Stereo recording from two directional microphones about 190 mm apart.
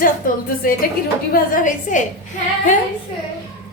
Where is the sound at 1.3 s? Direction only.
45° left (ahead or behind).